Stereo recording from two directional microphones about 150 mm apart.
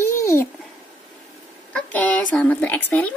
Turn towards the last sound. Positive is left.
turn(degrees=10)  # may be behind; listen again after turning